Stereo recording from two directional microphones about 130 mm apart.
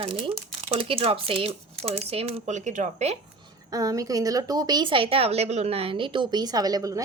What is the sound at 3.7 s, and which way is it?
A woman's voice, 25° right (ahead or behind).